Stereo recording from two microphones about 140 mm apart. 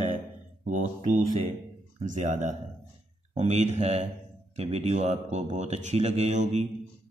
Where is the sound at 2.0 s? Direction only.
60° right (ahead or behind).